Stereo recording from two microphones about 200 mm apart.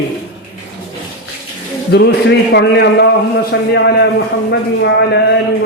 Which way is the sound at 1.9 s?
55° left (ahead or behind).